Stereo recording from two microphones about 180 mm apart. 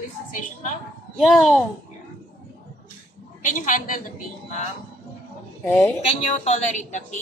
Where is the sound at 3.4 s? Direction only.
45° left (ahead or behind).